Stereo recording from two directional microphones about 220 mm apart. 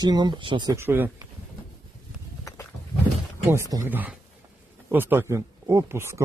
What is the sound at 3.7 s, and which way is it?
Speech, 10° right (ahead or behind).